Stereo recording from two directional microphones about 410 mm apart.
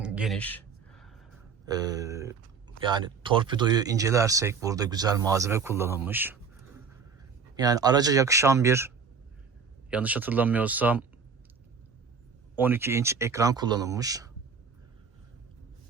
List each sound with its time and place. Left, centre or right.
0.0 s a sound: centre
1.6 s speech: centre
7.5 s speech: centre
9.9 s speech: centre
12.5 s speech: centre